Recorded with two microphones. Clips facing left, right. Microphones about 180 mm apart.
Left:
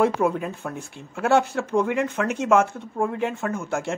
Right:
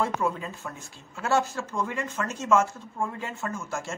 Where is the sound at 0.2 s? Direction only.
60° left (ahead or behind).